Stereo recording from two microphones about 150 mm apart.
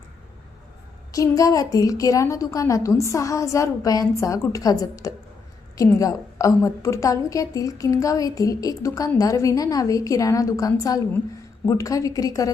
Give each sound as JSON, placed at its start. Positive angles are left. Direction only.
{"t": 1.1, "sound": "a woman's voice", "side_deg": 20}